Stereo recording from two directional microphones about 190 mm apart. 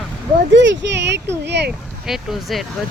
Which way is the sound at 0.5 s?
70° right (ahead or behind).